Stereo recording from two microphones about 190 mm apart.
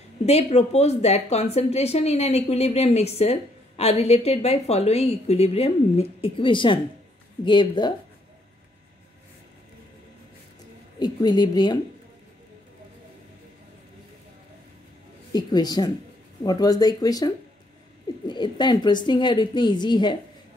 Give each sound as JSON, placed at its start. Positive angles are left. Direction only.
{"t": 0.2, "sound": "a woman's voice", "side_deg": 35}
{"t": 11.0, "sound": "a woman's voice", "side_deg": 20}
{"t": 15.3, "sound": "a woman's voice", "side_deg": 20}